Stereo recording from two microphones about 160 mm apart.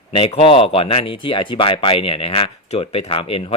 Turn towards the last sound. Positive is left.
turn(degrees=35)  # may be behind; listen again after turning